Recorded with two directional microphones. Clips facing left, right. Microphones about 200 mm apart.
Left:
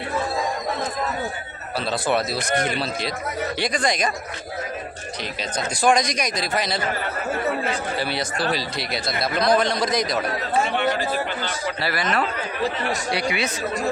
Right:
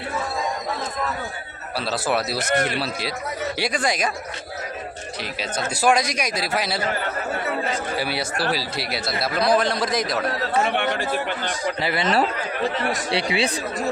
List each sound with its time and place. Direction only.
1.9 s a man's voice: 5° right (ahead or behind)
5.4 s a man's voice: 5° right (ahead or behind)
7.9 s a man's voice: 10° right (ahead or behind)
10.7 s speech: 55° right (ahead or behind)
11.8 s speech: 20° right (ahead or behind)
13.1 s speech: 30° right (ahead or behind)